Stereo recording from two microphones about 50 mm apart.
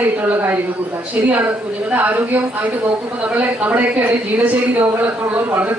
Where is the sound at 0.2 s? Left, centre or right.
Right.